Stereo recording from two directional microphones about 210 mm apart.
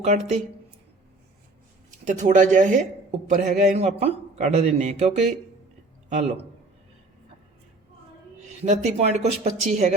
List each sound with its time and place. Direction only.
0.0 s a man's voice: 35° right (ahead or behind)
2.0 s a man's voice: 35° right (ahead or behind)
8.6 s a man's voice: 35° right (ahead or behind)